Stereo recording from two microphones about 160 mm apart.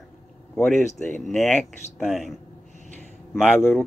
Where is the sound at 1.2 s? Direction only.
Centre (ahead or behind).